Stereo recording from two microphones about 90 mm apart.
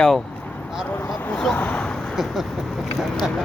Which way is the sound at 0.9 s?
20° left (ahead or behind).